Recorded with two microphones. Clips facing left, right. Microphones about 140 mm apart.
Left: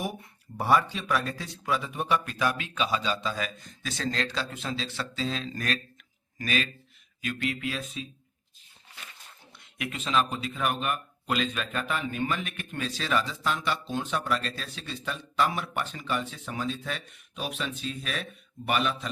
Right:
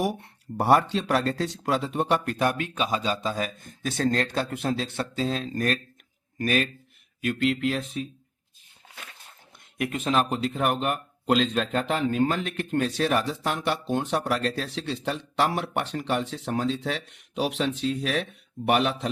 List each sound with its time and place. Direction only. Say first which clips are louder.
0.0 s speech: right 7 dB; 75° right (ahead or behind); by 6.7 s 55° right (ahead or behind)
7.2 s speech: right 7 dB; 65° right (ahead or behind)
9.7 s speech: right 3 dB; 50° right (ahead or behind); by 12.2 s 75° right (ahead or behind)
12.3 s speech: right 6 dB; 90° right; by 19.1 s 70° right (ahead or behind)